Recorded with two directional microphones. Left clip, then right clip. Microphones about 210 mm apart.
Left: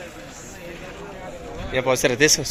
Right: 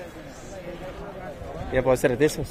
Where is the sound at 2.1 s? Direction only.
10° right (ahead or behind).